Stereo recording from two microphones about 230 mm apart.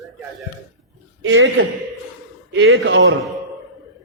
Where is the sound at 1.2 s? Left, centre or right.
Right.